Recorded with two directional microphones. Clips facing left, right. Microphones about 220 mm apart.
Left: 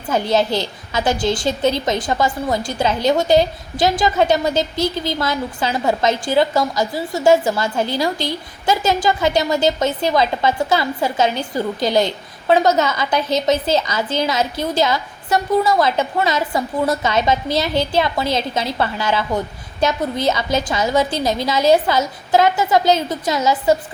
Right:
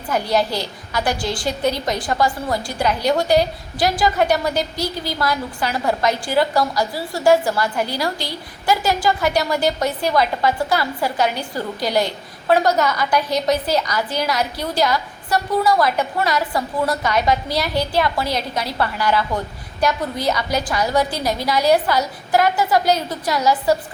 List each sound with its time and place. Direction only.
0.1 s a woman's voice: 25° left (ahead or behind)